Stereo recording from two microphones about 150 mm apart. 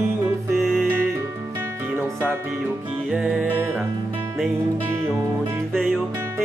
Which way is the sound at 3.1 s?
5° right (ahead or behind).